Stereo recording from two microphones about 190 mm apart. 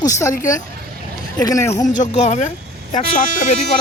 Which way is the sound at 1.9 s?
40° left (ahead or behind).